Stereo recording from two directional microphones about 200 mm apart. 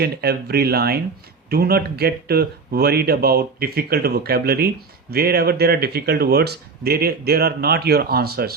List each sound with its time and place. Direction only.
0.0 s speech: 55° right (ahead or behind)